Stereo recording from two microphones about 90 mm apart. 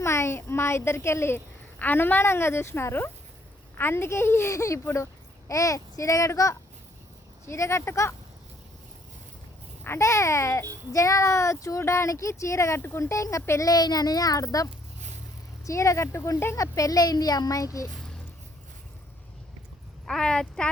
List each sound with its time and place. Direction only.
0.0 s a child's voice: 30° left (ahead or behind)
9.8 s speech: 30° left (ahead or behind)
13.7 s speech: 45° left (ahead or behind); by 16.6 s 30° left (ahead or behind)
16.6 s speech: 40° left (ahead or behind)
20.1 s speech: 5° left (ahead or behind)